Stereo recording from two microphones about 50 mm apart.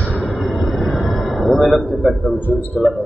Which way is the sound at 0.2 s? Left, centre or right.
Centre.